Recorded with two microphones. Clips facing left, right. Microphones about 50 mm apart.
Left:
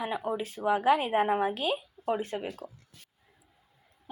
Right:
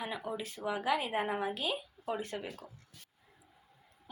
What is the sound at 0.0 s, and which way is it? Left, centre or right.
A woman's voice, left.